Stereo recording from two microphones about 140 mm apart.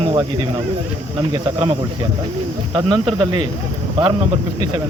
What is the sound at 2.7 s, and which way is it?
Speech, 30° right (ahead or behind).